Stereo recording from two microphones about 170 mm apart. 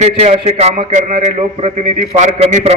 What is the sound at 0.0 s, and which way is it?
A man's voice, 40° right (ahead or behind).